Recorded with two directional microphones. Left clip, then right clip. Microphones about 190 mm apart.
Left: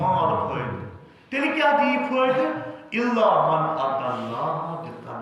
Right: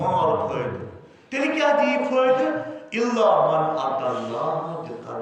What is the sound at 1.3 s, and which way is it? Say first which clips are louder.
Speech: even; 5° left (ahead or behind).